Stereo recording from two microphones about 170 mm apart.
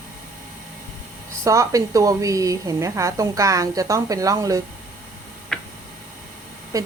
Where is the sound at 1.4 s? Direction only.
20° right (ahead or behind).